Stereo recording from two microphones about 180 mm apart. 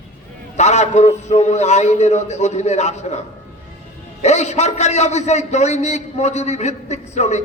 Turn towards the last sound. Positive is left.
turn(degrees=40)  # may be behind; listen again after turning